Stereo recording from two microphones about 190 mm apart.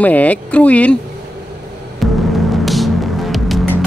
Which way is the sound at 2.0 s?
Centre (ahead or behind).